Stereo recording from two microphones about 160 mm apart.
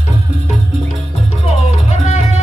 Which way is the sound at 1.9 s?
40° left (ahead or behind).